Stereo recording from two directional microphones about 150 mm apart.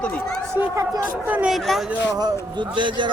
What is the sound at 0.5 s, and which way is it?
Speech, 15° right (ahead or behind).